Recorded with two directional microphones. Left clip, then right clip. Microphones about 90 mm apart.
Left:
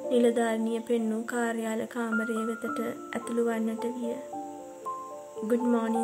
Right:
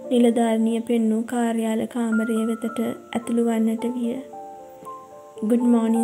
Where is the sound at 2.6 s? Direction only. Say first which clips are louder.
Right 5 dB; 30° right (ahead or behind).